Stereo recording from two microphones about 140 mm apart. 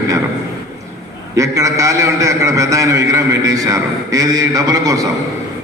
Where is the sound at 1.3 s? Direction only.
20° right (ahead or behind).